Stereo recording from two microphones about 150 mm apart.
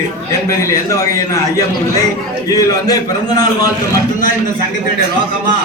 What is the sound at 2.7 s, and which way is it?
A man's voice, 25° left (ahead or behind).